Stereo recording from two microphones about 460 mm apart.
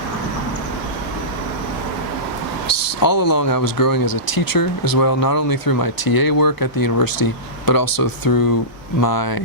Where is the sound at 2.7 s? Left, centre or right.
Left.